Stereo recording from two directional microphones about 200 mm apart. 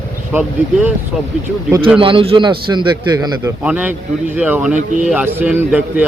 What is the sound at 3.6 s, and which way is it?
A man's voice, 10° right (ahead or behind).